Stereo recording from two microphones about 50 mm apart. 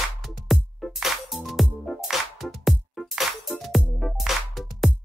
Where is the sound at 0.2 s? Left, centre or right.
Centre.